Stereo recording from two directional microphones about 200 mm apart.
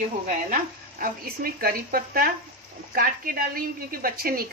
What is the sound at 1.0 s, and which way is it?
A woman's voice, 50° right (ahead or behind).